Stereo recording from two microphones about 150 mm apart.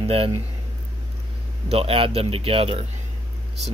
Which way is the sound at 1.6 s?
40° right (ahead or behind).